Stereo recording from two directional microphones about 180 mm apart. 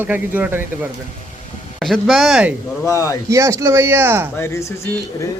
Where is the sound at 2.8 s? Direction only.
15° left (ahead or behind).